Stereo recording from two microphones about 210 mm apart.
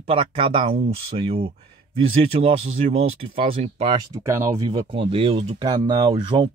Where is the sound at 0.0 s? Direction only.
25° right (ahead or behind).